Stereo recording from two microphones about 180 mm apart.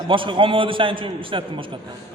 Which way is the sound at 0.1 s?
30° right (ahead or behind).